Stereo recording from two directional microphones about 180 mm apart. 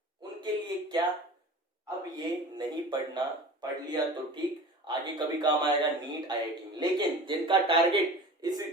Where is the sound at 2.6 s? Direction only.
25° right (ahead or behind).